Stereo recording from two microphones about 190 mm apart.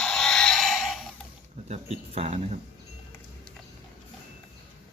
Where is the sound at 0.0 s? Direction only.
Centre (ahead or behind).